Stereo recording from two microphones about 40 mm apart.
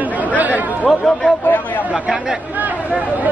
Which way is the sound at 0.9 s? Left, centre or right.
Centre.